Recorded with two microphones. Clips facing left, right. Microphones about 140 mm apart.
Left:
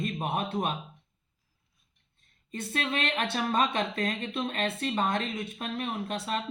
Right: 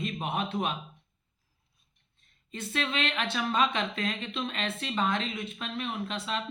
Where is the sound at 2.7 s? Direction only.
45° left (ahead or behind).